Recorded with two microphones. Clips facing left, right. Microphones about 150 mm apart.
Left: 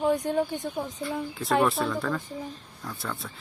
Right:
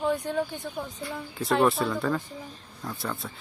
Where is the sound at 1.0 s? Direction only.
Centre (ahead or behind).